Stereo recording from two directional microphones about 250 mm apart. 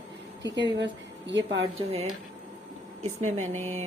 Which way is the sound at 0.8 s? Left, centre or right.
Right.